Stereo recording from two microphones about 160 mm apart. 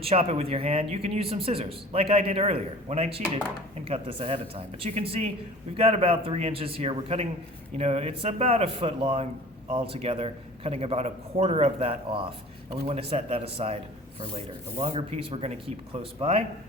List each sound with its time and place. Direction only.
0.0 s a man's voice: 40° right (ahead or behind)